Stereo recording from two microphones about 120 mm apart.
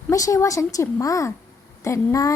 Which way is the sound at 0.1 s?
25° left (ahead or behind).